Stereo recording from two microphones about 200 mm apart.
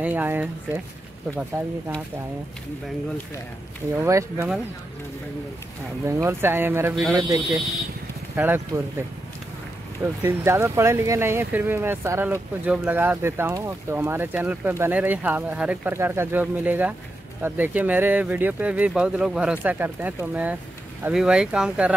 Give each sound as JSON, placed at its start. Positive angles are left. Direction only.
{"t": 0.0, "sound": "speech", "side_deg": -10}
{"t": 3.9, "sound": "speech", "side_deg": -15}
{"t": 6.0, "sound": "speech", "side_deg": -15}
{"t": 10.2, "sound": "speech", "side_deg": -10}